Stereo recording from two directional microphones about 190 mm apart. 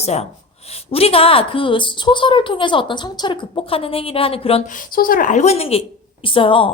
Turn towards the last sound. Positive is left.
turn(degrees=30)  # may be behind; listen again after turning